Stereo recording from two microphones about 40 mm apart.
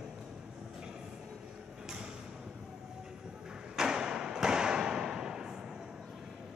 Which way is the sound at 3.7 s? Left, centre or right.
Centre.